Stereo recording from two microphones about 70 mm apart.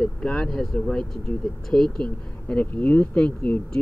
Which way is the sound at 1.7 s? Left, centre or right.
Centre.